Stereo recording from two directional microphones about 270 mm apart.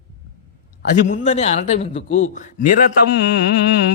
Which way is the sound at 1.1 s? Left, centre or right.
Left.